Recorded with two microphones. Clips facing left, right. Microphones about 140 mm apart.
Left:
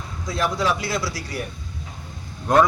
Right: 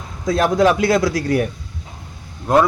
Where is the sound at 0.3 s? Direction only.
50° right (ahead or behind).